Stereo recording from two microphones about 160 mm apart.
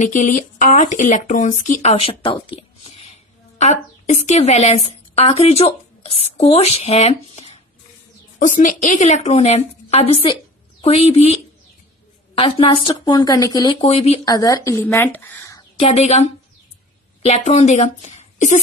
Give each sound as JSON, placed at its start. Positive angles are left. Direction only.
{"t": 0.0, "sound": "speech", "side_deg": 50}
{"t": 8.5, "sound": "a woman's voice", "side_deg": 55}
{"t": 12.4, "sound": "speech", "side_deg": 30}
{"t": 13.8, "sound": "a woman's voice", "side_deg": 40}
{"t": 14.2, "sound": "speech", "side_deg": 25}
{"t": 15.8, "sound": "a woman's voice", "side_deg": 45}